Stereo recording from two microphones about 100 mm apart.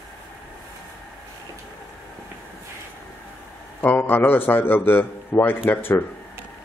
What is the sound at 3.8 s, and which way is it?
A man's voice, 20° left (ahead or behind).